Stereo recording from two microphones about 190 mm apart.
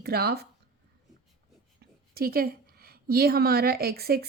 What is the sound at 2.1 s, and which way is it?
A woman's voice, 50° right (ahead or behind).